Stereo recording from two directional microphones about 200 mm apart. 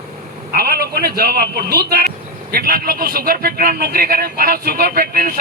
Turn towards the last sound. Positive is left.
turn(degrees=-50)  # may be behind; listen again after turning